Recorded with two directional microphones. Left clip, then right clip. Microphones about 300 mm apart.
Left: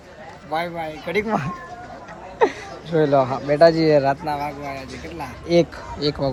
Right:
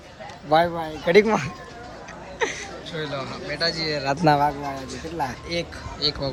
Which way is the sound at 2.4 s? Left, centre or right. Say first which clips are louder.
Left 7 dB; centre.